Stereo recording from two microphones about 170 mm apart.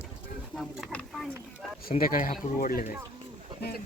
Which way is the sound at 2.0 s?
55° left (ahead or behind).